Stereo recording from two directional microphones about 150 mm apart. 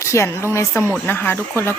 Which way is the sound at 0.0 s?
20° left (ahead or behind).